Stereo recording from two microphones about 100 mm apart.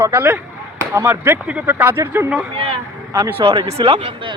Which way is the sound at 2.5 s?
65° right (ahead or behind).